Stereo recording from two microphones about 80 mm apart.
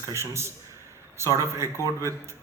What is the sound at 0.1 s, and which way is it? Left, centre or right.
Speech, right.